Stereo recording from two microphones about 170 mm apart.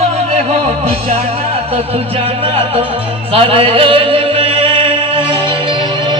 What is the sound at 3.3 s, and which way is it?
Music, 35° right (ahead or behind).